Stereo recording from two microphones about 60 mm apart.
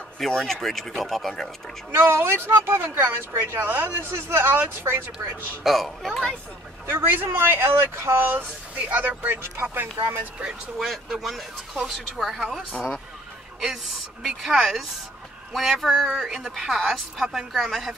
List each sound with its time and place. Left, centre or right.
0.2 s speech: centre
1.9 s speech: right
4.1 s a man's voice: right
4.5 s speech: right
5.6 s speech: centre
6.9 s speech: right
10.9 s speech: centre